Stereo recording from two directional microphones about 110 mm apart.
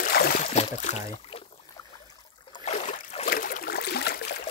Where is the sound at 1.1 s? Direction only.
60° left (ahead or behind).